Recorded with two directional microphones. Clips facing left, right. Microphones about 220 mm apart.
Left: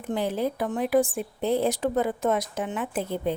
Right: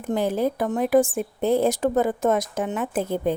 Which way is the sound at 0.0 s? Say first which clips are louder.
Right 4 dB; 45° right (ahead or behind).